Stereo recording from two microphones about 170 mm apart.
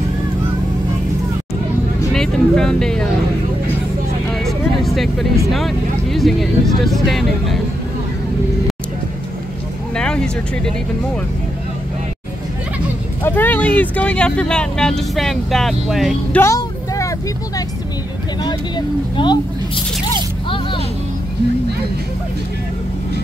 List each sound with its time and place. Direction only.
2.1 s speech: 5° left (ahead or behind)
4.3 s vehicle: centre (ahead or behind)
5.5 s speech: centre (ahead or behind)
9.9 s vehicle: 5° left (ahead or behind)
13.2 s speech: 10° left (ahead or behind)
16.3 s vehicle: 20° left (ahead or behind)
18.4 s speech: 25° left (ahead or behind)
20.4 s music: 30° left (ahead or behind)